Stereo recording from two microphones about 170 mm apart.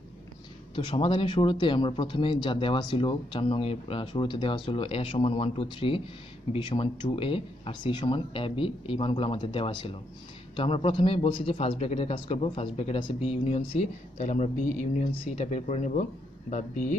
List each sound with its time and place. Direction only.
0.7 s speech: 30° left (ahead or behind); by 16.9 s 50° left (ahead or behind)